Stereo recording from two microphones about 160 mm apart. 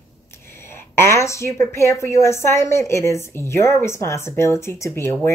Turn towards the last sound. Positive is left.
turn(degrees=15)  # may be behind; listen again after turning